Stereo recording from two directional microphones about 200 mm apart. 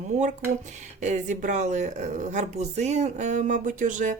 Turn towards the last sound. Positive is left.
turn(degrees=-40)  # may be behind; listen again after turning